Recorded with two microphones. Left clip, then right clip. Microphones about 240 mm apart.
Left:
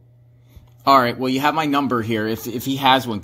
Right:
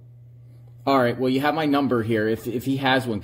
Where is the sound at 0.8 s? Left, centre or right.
Centre.